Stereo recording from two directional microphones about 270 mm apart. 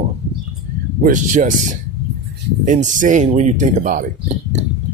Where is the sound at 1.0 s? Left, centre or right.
Right.